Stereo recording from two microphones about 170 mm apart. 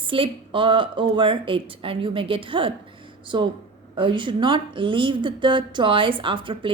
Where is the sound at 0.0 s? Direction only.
30° right (ahead or behind).